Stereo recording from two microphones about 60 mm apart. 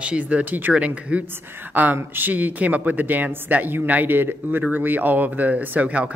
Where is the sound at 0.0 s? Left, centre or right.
Right.